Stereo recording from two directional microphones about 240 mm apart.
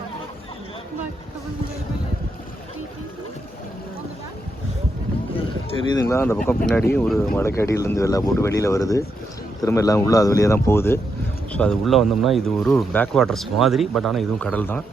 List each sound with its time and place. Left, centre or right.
5.8 s speech: centre